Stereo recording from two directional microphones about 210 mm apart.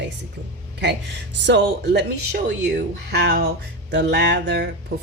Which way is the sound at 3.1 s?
50° right (ahead or behind).